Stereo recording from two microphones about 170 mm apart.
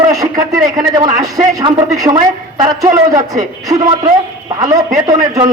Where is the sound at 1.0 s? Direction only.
45° right (ahead or behind).